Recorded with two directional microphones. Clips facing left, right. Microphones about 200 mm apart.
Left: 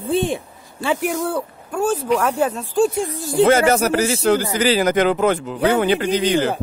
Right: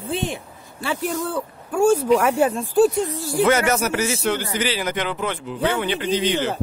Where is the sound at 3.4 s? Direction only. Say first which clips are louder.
Left 4 dB; 30° left (ahead or behind).